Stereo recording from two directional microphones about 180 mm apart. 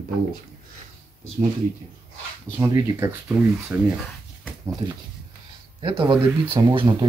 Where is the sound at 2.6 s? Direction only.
15° right (ahead or behind).